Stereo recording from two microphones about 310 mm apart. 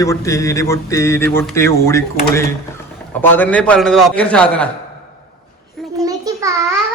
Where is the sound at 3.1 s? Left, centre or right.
Centre.